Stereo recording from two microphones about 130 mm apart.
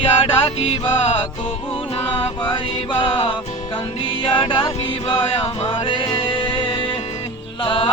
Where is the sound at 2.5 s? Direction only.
40° left (ahead or behind).